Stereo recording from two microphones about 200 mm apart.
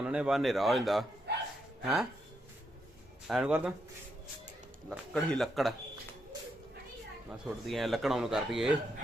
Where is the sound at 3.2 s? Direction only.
5° right (ahead or behind).